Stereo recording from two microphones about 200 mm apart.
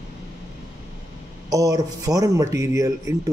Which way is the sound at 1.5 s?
15° right (ahead or behind).